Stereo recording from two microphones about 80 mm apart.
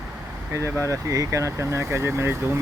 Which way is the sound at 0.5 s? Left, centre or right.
Right.